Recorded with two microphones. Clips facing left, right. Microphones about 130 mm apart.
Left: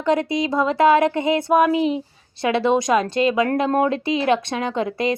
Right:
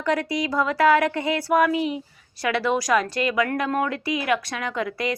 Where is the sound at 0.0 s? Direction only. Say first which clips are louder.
Left 4 dB; 20° left (ahead or behind).